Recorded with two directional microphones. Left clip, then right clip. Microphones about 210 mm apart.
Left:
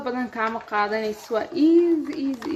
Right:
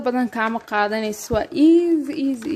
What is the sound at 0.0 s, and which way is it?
Speech, 45° right (ahead or behind).